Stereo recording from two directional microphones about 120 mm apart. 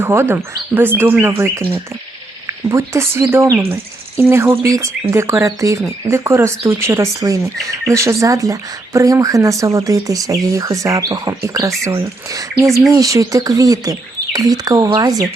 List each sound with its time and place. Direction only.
0.0 s speech: 20° right (ahead or behind)
2.6 s speech: 25° right (ahead or behind)